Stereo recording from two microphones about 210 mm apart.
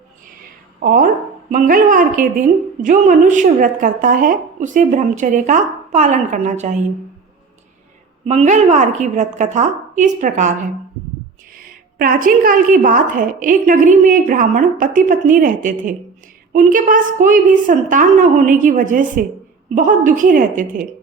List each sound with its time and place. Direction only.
0.8 s a woman's voice: 40° right (ahead or behind)
8.2 s a woman's voice: 30° right (ahead or behind)
11.9 s a woman's voice: 40° right (ahead or behind)